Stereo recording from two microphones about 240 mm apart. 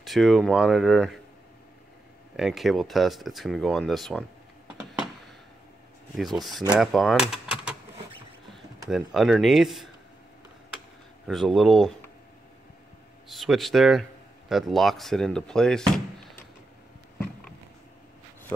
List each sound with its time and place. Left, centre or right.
0.0 s speech: centre
2.3 s speech: centre
6.1 s speech: centre
8.8 s speech: centre
11.2 s speech: centre
13.3 s speech: centre